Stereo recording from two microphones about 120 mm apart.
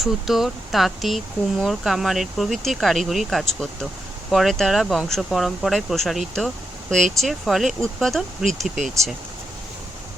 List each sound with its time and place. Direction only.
0.0 s speech: centre (ahead or behind)